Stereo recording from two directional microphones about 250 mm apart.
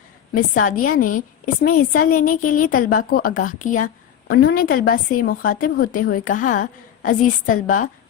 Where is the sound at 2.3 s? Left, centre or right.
Left.